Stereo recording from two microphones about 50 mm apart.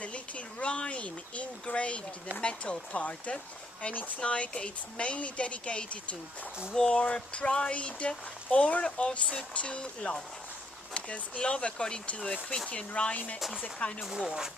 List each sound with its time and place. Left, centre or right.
0.0 s speech: left
14.0 s speech: centre